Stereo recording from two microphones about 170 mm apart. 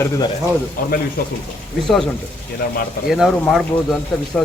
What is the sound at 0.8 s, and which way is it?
Speech, 55° left (ahead or behind).